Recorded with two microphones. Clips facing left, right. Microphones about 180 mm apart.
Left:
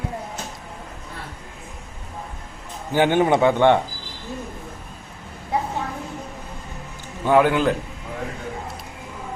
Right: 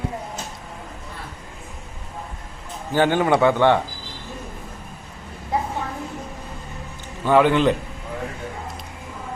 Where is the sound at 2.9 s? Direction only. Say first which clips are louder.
Left 1 dB; 15° left (ahead or behind).